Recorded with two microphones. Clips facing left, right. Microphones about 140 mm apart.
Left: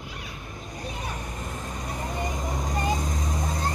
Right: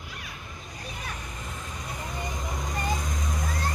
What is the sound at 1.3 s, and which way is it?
Vehicle, 40° left (ahead or behind).